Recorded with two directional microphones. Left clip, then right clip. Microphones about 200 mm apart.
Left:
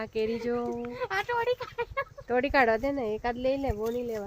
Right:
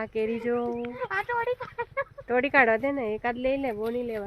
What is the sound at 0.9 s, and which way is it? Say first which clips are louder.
Speech: even; 45° left (ahead or behind).